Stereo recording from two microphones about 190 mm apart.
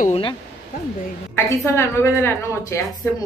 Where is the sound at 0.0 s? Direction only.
30° left (ahead or behind).